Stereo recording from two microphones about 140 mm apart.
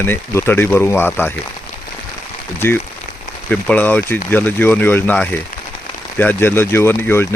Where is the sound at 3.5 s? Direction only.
10° left (ahead or behind).